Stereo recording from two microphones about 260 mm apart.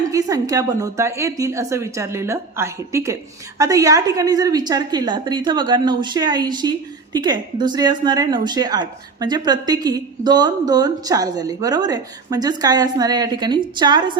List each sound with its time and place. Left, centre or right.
0.1 s a woman's voice: centre